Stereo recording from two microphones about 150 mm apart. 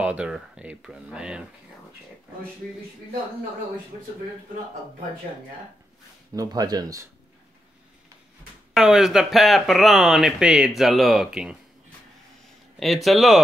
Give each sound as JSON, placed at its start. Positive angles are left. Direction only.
{"t": 0.0, "sound": "speech", "side_deg": -10}
{"t": 6.3, "sound": "speech", "side_deg": -25}
{"t": 8.7, "sound": "speech", "side_deg": -5}
{"t": 12.7, "sound": "speech", "side_deg": 0}